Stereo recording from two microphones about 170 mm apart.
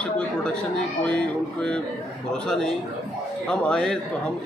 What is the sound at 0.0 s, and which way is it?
Chatter, 5° left (ahead or behind).